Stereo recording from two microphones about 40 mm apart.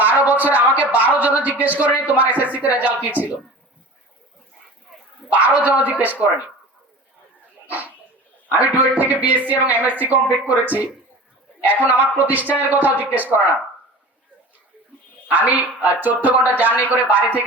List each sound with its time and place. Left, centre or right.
0.0 s speech: right
5.3 s speech: right
8.5 s speech: right
15.3 s speech: right